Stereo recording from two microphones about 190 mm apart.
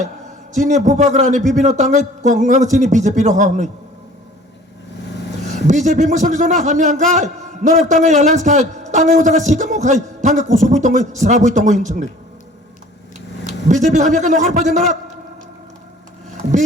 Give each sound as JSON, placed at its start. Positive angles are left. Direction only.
{"t": 0.5, "sound": "a man's voice", "side_deg": -40}
{"t": 5.5, "sound": "a man's voice", "side_deg": -40}
{"t": 13.7, "sound": "a man's voice", "side_deg": -40}